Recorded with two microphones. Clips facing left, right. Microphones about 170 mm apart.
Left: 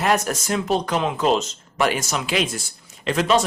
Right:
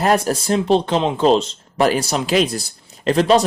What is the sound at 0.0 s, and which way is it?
Speech, 35° right (ahead or behind).